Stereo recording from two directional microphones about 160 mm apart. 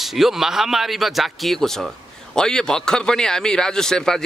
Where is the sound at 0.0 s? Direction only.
Centre (ahead or behind).